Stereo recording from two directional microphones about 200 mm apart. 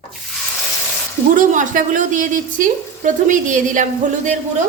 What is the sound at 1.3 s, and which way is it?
A woman's voice, 40° right (ahead or behind).